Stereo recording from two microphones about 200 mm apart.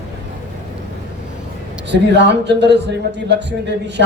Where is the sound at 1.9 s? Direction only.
60° right (ahead or behind).